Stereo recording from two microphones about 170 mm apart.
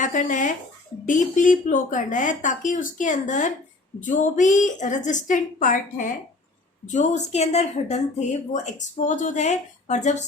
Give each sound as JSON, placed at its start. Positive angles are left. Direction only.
{"t": 0.0, "sound": "speech", "side_deg": 50}